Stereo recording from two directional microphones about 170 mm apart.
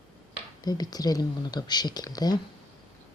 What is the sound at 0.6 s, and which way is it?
Speech, 25° left (ahead or behind).